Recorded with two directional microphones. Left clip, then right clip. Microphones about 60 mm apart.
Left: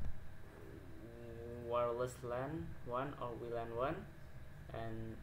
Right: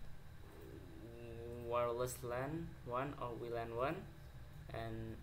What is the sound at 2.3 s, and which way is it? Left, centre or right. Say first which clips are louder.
Speech: even; centre.